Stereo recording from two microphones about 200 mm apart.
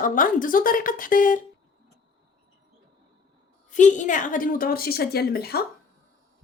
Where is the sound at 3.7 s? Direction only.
40° left (ahead or behind).